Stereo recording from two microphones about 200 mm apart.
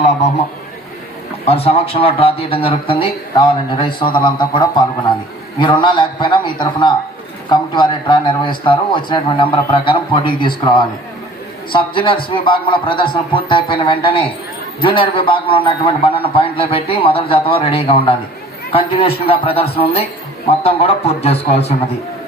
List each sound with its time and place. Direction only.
1.5 s speech: 30° left (ahead or behind)